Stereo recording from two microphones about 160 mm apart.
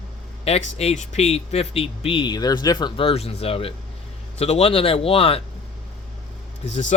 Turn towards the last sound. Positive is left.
turn(degrees=50)  # may be behind; listen again after turning